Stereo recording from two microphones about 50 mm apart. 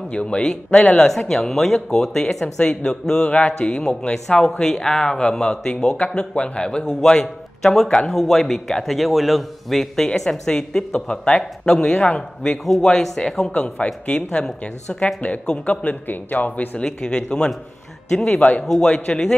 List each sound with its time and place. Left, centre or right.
0.1 s a man's voice: left
7.6 s a man's voice: centre; by 16.8 s left
16.8 s a man's voice: centre
18.4 s a man's voice: left